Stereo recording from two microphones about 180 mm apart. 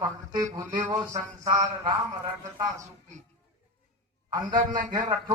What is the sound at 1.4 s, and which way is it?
Speech, 20° right (ahead or behind).